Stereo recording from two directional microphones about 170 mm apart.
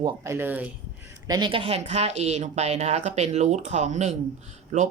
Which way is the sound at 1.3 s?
30° right (ahead or behind).